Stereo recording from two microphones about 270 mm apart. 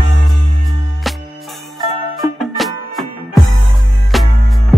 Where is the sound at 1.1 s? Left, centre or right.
Centre.